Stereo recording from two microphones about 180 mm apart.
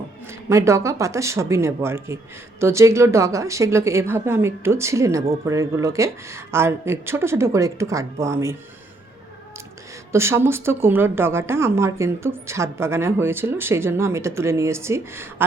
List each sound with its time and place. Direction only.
0.4 s a woman's voice: 15° right (ahead or behind)
10.1 s a woman's voice: 15° right (ahead or behind)